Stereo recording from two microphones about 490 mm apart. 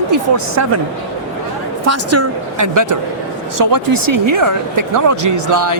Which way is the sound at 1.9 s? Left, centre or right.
Right.